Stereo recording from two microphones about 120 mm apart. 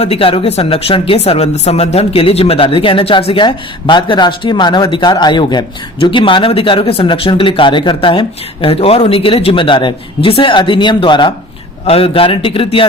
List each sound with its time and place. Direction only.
0.0 s speech: 55° left (ahead or behind)
11.9 s speech: 55° left (ahead or behind)